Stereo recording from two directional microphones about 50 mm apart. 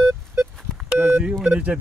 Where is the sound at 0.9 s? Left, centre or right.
Right.